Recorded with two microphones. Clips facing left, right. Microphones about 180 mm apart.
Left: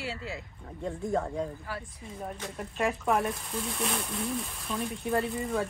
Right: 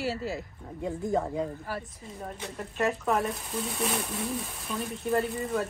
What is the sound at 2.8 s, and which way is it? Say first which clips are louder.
Speech: right 1 dB; centre (ahead or behind).